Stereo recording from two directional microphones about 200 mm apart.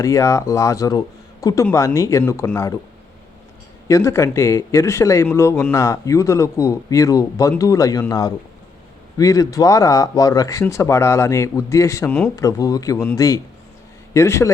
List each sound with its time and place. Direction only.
0.0 s speech: 15° left (ahead or behind)
3.8 s speech: 15° left (ahead or behind)